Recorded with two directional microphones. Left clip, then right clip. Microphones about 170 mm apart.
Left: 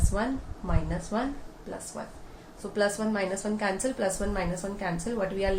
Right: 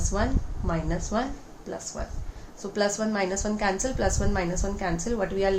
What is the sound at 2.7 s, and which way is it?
A woman's voice, 40° right (ahead or behind).